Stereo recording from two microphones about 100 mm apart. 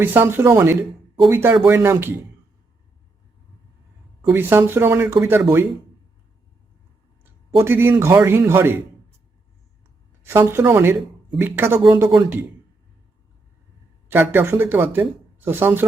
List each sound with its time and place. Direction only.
0.0 s speech: 20° right (ahead or behind)
4.2 s speech: 20° right (ahead or behind)
7.6 s speech: 25° right (ahead or behind)
10.2 s speech: 25° right (ahead or behind)
14.1 s speech: 20° right (ahead or behind)